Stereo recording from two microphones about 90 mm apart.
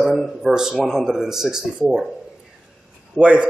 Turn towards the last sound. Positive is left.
turn(degrees=-10)  # may be behind; listen again after turning